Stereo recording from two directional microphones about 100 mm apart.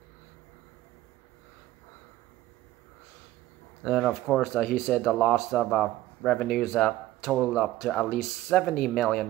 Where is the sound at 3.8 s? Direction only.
5° left (ahead or behind).